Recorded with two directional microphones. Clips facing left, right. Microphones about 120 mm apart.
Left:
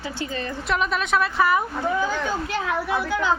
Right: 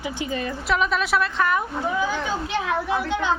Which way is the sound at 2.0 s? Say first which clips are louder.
Even; 15° right (ahead or behind).